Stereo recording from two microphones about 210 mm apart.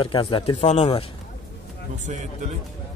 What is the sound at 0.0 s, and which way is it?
Speech, 25° left (ahead or behind).